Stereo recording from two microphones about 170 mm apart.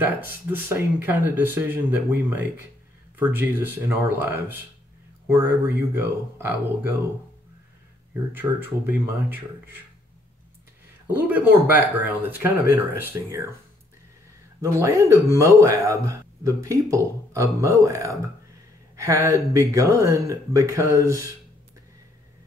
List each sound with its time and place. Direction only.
0.0 s speech: 15° right (ahead or behind)
8.3 s speech: 10° right (ahead or behind)
11.1 s speech: 10° right (ahead or behind)
14.6 s speech: 15° right (ahead or behind)